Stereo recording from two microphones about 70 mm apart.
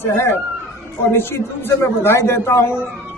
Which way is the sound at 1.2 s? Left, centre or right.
Left.